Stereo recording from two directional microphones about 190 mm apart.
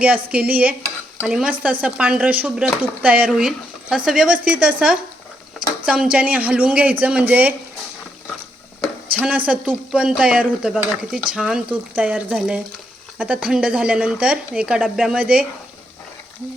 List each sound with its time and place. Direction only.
0.0 s speech: 5° right (ahead or behind)
9.1 s speech: 10° right (ahead or behind)